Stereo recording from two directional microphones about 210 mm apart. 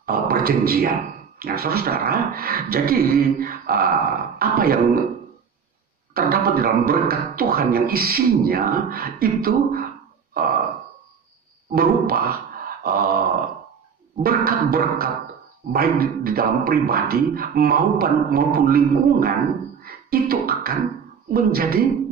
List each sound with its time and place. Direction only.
0.0 s a man's voice: 45° right (ahead or behind)
6.1 s a man's voice: 45° right (ahead or behind)
10.3 s a sound: 45° right (ahead or behind)
11.7 s a man's voice: 45° right (ahead or behind)
14.2 s a man's voice: 45° right (ahead or behind)
19.8 s beatboxing: 45° right (ahead or behind)
21.3 s a man's voice: 45° right (ahead or behind)